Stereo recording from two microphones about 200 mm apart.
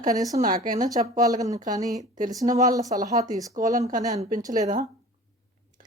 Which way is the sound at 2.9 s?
40° right (ahead or behind).